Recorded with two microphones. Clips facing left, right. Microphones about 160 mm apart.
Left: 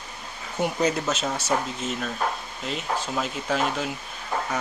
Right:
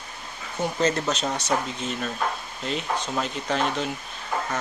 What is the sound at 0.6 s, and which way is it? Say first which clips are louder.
Speech: even; 10° left (ahead or behind).